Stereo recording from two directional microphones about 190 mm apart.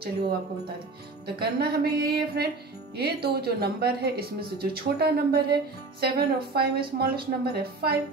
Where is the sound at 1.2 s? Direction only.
55° right (ahead or behind).